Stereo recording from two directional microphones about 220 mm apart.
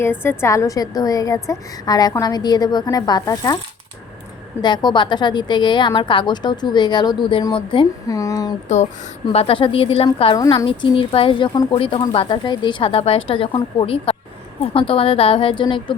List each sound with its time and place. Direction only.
0.0 s a woman's voice: 10° left (ahead or behind)
4.6 s a woman's voice: 20° left (ahead or behind)
9.3 s a woman's voice: 25° left (ahead or behind)